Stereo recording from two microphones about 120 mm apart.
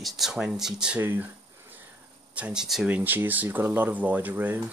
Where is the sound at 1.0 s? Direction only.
15° right (ahead or behind).